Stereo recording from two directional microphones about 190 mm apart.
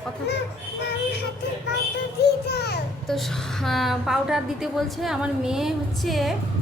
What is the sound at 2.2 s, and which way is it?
Speech, 60° left (ahead or behind).